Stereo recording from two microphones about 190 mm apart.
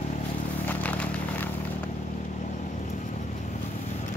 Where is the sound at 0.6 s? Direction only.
10° left (ahead or behind).